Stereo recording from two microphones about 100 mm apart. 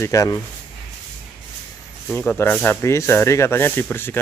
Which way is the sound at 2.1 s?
20° left (ahead or behind).